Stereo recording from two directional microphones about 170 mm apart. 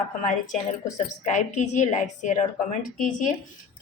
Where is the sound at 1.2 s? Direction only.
45° left (ahead or behind).